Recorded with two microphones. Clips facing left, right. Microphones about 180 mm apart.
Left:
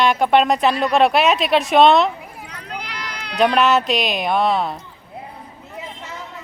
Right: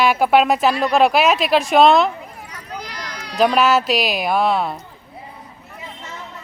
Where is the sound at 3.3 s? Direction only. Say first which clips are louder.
Even; centre (ahead or behind).